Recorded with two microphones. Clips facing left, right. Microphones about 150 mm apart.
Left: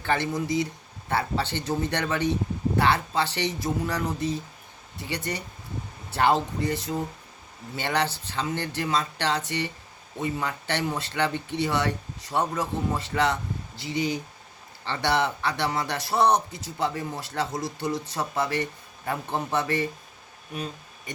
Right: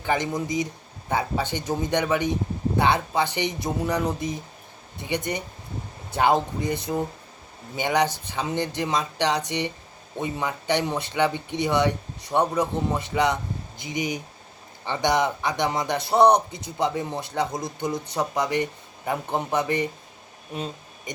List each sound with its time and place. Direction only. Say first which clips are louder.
0.0 s speech: right 1 dB; 15° right (ahead or behind)